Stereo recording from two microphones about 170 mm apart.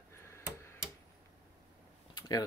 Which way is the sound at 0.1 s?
15° left (ahead or behind).